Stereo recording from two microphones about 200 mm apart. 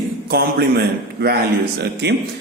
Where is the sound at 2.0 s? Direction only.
55° right (ahead or behind).